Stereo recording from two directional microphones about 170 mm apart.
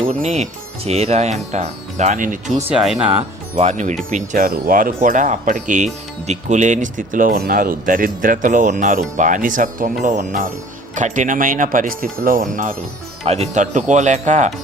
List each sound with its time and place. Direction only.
0.2 s speech: 40° right (ahead or behind)
2.7 s speech: centre (ahead or behind)
3.6 s speech: 45° right (ahead or behind)
13.2 s speech: 40° right (ahead or behind)